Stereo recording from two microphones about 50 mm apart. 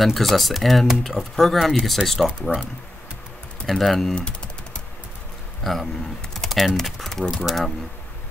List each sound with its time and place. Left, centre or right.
0.0 s speech: centre
3.6 s speech: centre
4.1 s typing: left
5.6 s speech: centre
6.3 s typing: centre
7.4 s speech: centre